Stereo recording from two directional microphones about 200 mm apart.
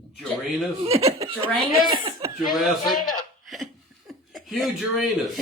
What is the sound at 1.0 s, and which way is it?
Speech, 30° right (ahead or behind).